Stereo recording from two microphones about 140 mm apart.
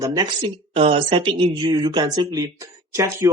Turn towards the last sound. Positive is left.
turn(degrees=-20)  # may be behind; listen again after turning